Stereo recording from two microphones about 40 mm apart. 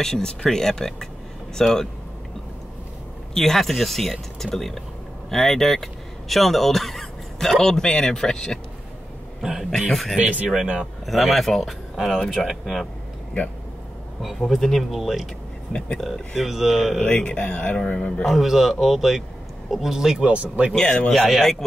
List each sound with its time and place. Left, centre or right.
0.0 s speech: centre
3.3 s speech: centre
9.4 s speech: centre
9.7 s speech: centre
10.1 s speech: right
11.1 s speech: centre
12.4 s speech: centre
14.5 s speech: centre
17.0 s speech: left
18.2 s speech: centre
20.2 s speech: right
20.7 s speech: left